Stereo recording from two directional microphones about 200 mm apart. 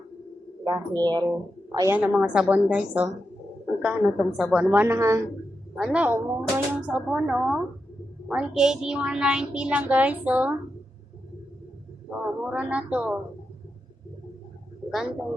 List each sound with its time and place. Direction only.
0.6 s a woman's voice: 20° right (ahead or behind)
12.1 s a woman's voice: 5° right (ahead or behind)